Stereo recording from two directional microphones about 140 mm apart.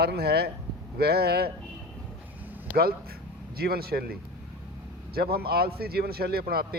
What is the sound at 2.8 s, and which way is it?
A man's voice, 90° right.